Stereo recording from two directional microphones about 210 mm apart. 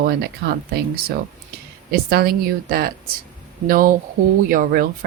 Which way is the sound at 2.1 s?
50° right (ahead or behind).